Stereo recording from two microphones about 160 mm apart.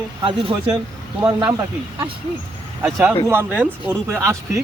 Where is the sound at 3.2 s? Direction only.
15° right (ahead or behind).